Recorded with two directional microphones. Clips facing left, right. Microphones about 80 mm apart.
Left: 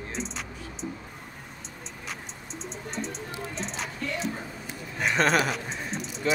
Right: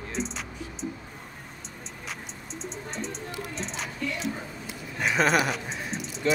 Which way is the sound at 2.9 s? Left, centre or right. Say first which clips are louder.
Left 2 dB; centre.